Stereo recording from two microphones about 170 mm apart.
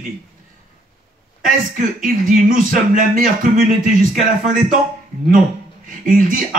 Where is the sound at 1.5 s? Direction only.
55° right (ahead or behind).